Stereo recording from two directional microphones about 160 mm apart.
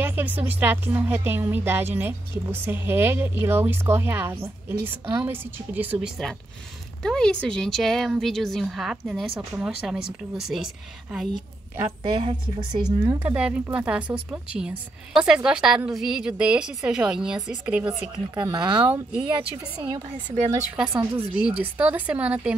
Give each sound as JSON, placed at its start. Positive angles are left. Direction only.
{"t": 0.0, "sound": "speech", "side_deg": -10}
{"t": 12.0, "sound": "speech", "side_deg": -30}
{"t": 13.2, "sound": "speech", "side_deg": -10}
{"t": 18.3, "sound": "speech", "side_deg": -25}
{"t": 18.9, "sound": "speech", "side_deg": -10}
{"t": 19.2, "sound": "speech", "side_deg": -30}
{"t": 20.7, "sound": "speech", "side_deg": -5}